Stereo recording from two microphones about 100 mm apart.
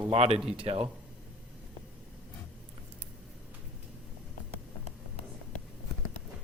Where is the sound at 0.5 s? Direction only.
65° right (ahead or behind).